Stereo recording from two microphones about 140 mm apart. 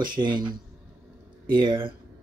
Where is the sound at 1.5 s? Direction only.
35° right (ahead or behind).